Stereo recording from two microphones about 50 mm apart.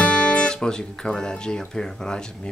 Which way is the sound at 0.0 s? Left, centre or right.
Left.